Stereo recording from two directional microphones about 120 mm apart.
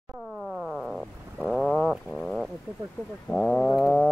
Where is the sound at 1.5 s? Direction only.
Centre (ahead or behind).